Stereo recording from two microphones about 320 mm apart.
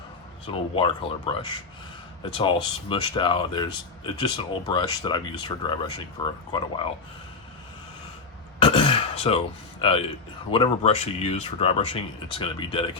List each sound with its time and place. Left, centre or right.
0.4 s speech: centre
8.5 s throat clearing: centre
9.8 s speech: centre